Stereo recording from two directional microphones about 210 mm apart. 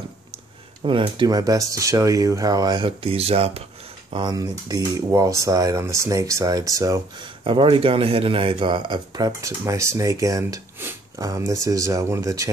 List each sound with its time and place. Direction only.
0.8 s speech: 25° right (ahead or behind)